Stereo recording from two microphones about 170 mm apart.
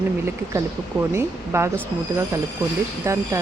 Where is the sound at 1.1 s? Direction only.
15° right (ahead or behind).